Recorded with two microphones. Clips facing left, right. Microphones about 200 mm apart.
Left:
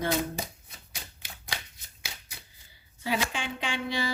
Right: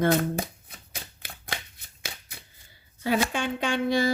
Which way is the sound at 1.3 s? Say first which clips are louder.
Right 3 dB; 60° right (ahead or behind).